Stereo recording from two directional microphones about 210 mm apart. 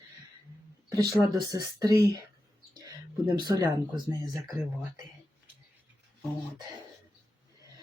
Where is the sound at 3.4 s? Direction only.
20° right (ahead or behind).